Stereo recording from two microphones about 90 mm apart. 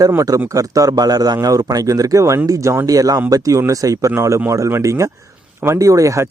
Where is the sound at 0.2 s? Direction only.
35° right (ahead or behind).